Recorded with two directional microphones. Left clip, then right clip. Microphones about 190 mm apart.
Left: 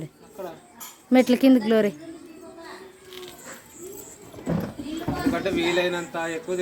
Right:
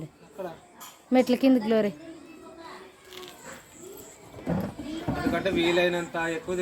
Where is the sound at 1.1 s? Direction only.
15° left (ahead or behind).